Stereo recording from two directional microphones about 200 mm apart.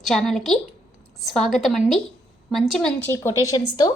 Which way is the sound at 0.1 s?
Centre (ahead or behind).